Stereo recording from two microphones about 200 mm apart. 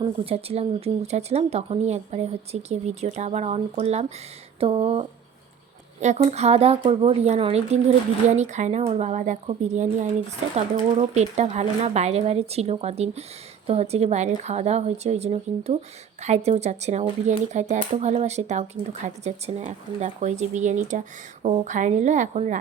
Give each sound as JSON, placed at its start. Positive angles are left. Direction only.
{"t": 0.0, "sound": "speech", "side_deg": -30}